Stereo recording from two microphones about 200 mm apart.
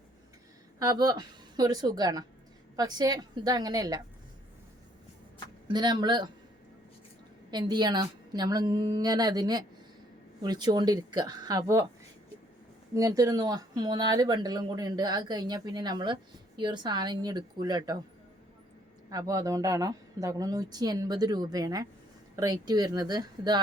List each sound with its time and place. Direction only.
0.8 s speech: 20° right (ahead or behind)
5.6 s speech: 20° right (ahead or behind)
7.5 s speech: 20° right (ahead or behind)
12.9 s speech: 15° right (ahead or behind)
19.1 s a woman's voice: 15° right (ahead or behind)